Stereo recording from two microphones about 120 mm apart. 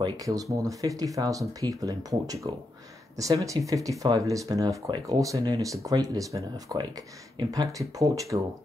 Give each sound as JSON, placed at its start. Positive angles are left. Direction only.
{"t": 0.0, "sound": "speech", "side_deg": -30}